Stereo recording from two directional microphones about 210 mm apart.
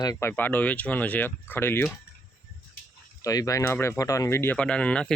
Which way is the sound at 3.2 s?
15° left (ahead or behind).